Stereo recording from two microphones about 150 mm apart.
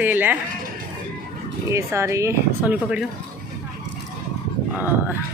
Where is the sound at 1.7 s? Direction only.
20° right (ahead or behind).